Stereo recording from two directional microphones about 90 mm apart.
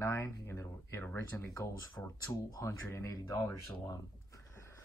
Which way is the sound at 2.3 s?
40° left (ahead or behind).